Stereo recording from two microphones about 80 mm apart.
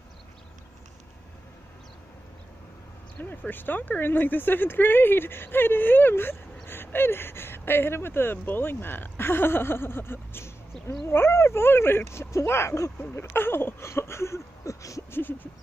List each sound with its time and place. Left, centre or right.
3.2 s speech: left
15.1 s speech: left